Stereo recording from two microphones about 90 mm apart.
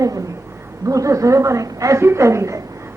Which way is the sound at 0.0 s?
40° right (ahead or behind).